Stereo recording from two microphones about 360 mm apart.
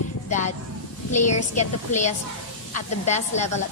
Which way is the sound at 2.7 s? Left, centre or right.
Centre.